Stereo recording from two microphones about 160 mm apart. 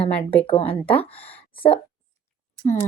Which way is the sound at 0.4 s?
35° left (ahead or behind).